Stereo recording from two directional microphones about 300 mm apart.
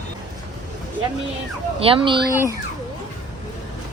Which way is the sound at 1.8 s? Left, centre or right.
Centre.